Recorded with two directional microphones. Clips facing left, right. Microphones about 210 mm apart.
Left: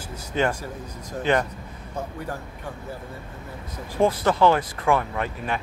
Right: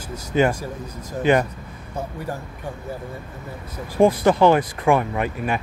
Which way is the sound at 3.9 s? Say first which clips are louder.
Right 5 dB; 15° right (ahead or behind).